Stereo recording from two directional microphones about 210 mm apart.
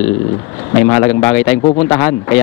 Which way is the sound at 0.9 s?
15° left (ahead or behind).